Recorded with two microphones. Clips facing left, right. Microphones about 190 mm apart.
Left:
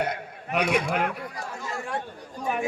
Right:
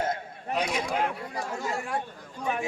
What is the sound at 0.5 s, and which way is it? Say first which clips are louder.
Speech: left 5 dB; 65° left (ahead or behind).